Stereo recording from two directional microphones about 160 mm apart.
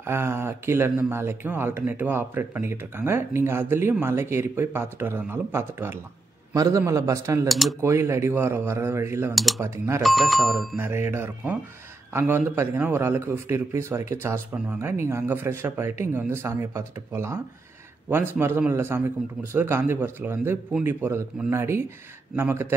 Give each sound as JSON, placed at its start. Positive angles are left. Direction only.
{"t": 0.0, "sound": "a man's voice", "side_deg": -15}
{"t": 7.4, "sound": "speech", "side_deg": 0}
{"t": 7.8, "sound": "speech", "side_deg": -15}
{"t": 9.3, "sound": "speech", "side_deg": 0}
{"t": 9.6, "sound": "speech", "side_deg": -15}
{"t": 10.0, "sound": "speech", "side_deg": 0}
{"t": 10.8, "sound": "speech", "side_deg": -15}